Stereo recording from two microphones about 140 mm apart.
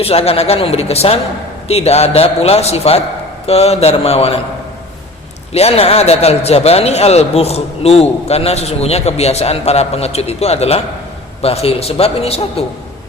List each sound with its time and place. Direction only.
0.0 s a man's voice: 45° left (ahead or behind)
5.5 s a man's voice: 45° left (ahead or behind)